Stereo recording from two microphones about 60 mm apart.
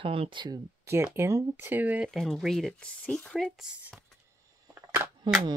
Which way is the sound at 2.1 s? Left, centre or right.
Centre.